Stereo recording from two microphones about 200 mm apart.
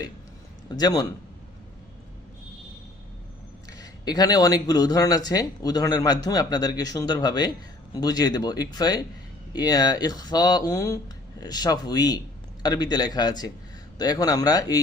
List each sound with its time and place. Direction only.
0.7 s speech: 20° left (ahead or behind)
3.8 s speech: 20° left (ahead or behind)